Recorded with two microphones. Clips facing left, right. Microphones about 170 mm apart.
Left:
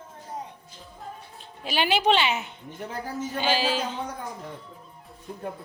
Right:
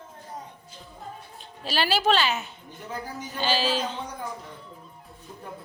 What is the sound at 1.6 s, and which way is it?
A woman's voice, 15° left (ahead or behind).